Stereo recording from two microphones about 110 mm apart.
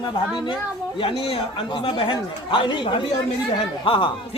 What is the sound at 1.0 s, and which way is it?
Speech, 55° left (ahead or behind).